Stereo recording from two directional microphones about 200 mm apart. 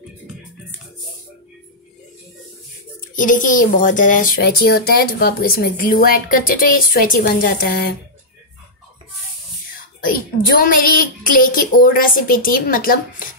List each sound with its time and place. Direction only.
3.2 s speech: 40° left (ahead or behind)
10.0 s speech: 45° left (ahead or behind)